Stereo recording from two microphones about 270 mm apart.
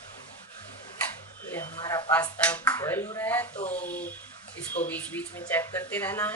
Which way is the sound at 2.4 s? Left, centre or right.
Centre.